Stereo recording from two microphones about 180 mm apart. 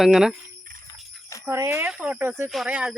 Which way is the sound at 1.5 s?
15° right (ahead or behind).